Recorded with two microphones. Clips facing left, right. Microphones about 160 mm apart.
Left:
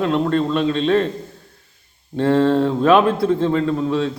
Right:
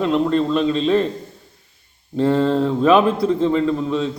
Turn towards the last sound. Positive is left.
turn(degrees=0)  # may be behind; listen again after turning